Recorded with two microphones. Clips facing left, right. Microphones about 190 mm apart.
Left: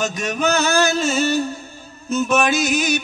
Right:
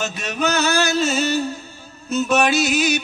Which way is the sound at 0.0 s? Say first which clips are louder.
Left 2 dB; 50° left (ahead or behind).